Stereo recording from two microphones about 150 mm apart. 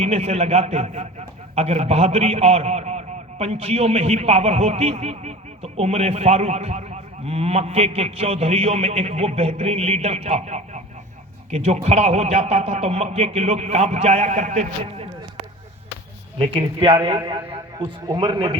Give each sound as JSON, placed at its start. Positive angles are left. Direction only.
{"t": 0.0, "sound": "a man's voice", "side_deg": -45}
{"t": 16.4, "sound": "a man's voice", "side_deg": -40}